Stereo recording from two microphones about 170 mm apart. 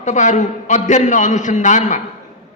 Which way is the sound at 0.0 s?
45° left (ahead or behind).